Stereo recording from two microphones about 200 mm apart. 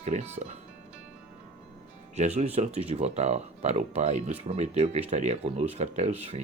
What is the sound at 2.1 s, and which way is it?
Speech, 35° right (ahead or behind).